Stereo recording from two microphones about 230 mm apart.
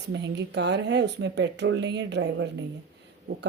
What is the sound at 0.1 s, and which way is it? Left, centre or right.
A woman's voice, right.